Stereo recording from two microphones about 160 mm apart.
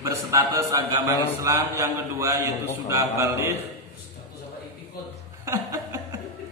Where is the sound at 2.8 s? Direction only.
20° right (ahead or behind).